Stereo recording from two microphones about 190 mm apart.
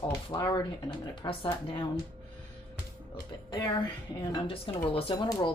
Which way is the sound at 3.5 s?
20° left (ahead or behind).